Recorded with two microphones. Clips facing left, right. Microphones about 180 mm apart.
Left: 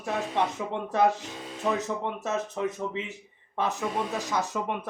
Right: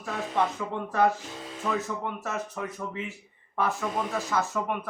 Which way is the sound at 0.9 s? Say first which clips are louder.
Left 1 dB; 20° left (ahead or behind).